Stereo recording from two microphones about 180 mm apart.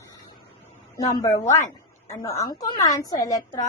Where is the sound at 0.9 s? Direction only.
20° left (ahead or behind).